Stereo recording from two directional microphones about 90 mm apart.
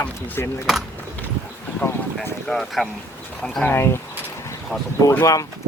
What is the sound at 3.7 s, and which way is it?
Speech, 25° left (ahead or behind).